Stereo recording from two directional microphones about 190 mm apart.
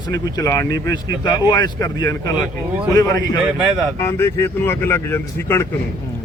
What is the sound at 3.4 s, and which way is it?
Speech, centre (ahead or behind).